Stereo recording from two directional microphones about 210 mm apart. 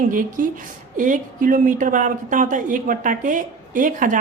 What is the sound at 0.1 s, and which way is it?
Speech, 40° right (ahead or behind).